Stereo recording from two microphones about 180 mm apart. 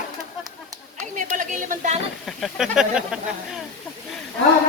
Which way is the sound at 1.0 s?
45° right (ahead or behind).